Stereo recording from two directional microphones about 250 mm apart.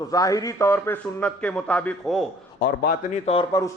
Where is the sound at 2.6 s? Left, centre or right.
Left; by 3.7 s centre.